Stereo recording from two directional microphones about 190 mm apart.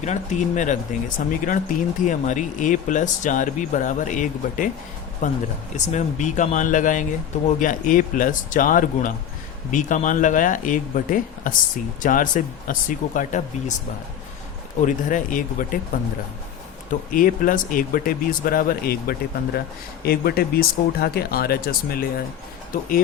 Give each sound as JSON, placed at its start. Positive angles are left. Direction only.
{"t": 0.0, "sound": "speech", "side_deg": 40}
{"t": 14.8, "sound": "speech", "side_deg": 45}
{"t": 17.1, "sound": "speech", "side_deg": 45}